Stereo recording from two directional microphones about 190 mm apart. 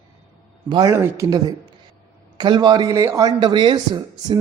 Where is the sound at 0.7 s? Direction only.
20° right (ahead or behind).